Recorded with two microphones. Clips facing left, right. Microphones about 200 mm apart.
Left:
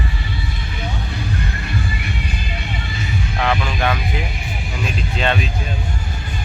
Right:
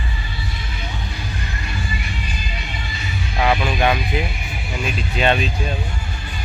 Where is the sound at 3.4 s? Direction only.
15° right (ahead or behind).